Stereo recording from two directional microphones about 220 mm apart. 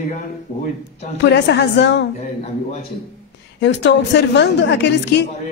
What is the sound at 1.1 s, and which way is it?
Speech, 50° left (ahead or behind).